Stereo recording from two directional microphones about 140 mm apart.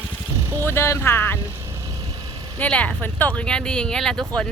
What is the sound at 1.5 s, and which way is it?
Vehicle, 20° right (ahead or behind).